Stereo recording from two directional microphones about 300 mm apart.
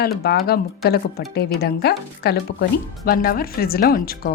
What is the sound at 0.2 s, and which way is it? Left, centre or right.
Speech, left.